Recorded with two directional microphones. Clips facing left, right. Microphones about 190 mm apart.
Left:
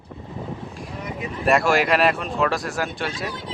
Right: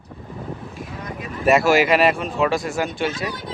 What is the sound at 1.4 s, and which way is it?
Speech, centre (ahead or behind).